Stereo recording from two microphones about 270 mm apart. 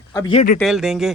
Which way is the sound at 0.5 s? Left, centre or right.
Centre.